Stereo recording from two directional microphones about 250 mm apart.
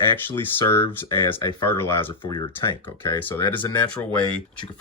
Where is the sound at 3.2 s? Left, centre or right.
Centre.